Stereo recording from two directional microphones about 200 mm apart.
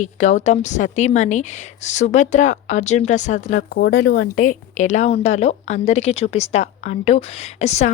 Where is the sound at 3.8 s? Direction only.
55° left (ahead or behind).